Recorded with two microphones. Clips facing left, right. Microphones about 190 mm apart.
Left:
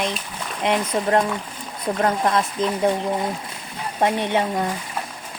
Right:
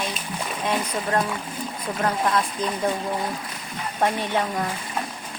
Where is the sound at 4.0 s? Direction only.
20° left (ahead or behind).